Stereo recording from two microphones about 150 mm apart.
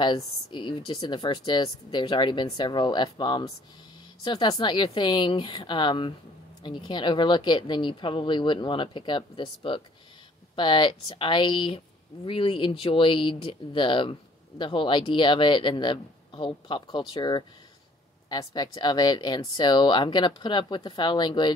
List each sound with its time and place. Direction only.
0.0 s a woman's voice: 30° left (ahead or behind)